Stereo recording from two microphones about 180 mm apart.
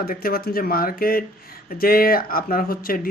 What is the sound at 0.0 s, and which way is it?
Speech, 55° left (ahead or behind).